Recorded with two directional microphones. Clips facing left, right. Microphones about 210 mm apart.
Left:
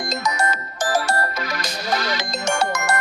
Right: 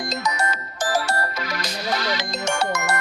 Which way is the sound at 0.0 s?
50° left (ahead or behind).